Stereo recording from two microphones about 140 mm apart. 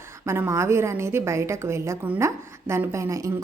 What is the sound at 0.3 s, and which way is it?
A woman's voice, 20° right (ahead or behind).